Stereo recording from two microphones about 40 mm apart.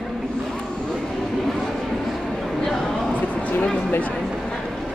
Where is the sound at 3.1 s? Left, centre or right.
Left.